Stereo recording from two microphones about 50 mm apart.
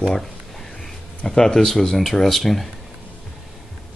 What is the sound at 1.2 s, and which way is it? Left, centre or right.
Speech, centre.